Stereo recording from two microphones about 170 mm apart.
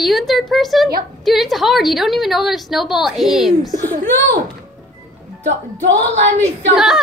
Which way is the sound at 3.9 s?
55° right (ahead or behind).